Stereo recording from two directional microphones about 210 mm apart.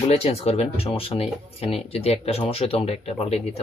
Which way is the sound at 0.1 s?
30° left (ahead or behind).